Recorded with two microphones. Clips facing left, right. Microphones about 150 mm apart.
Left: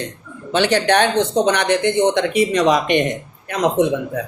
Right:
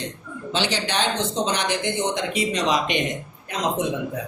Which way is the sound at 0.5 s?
55° left (ahead or behind).